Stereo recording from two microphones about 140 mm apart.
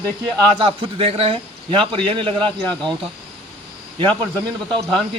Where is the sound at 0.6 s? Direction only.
40° right (ahead or behind).